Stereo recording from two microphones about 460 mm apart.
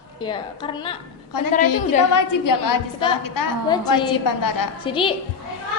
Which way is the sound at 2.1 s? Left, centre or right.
Left.